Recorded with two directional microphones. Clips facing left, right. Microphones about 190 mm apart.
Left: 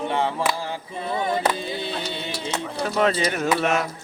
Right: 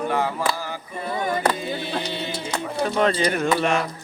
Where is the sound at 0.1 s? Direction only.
25° left (ahead or behind).